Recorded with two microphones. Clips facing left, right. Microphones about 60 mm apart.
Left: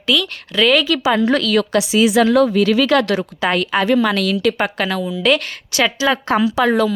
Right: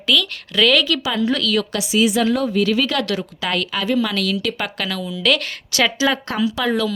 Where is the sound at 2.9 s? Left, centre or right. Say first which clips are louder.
Left 6 dB; left.